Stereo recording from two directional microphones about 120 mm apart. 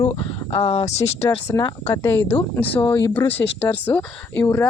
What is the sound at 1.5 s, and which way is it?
Speech, 30° left (ahead or behind).